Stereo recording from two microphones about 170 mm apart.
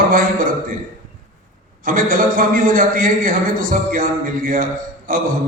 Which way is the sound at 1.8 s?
55° right (ahead or behind).